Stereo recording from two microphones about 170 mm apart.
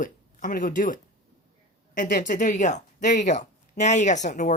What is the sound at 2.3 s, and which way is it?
Speech, 45° left (ahead or behind).